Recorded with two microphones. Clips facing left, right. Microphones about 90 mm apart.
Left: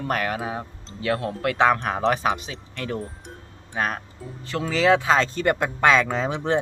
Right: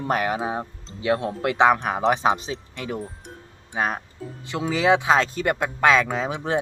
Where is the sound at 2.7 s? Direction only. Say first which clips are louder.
Left 1 dB; 5° right (ahead or behind).